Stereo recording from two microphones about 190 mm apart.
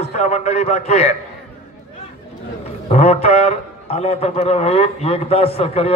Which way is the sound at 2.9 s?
35° left (ahead or behind).